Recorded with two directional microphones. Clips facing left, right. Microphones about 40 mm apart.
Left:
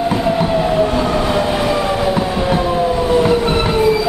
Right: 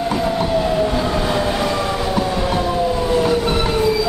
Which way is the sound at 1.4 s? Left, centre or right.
Centre.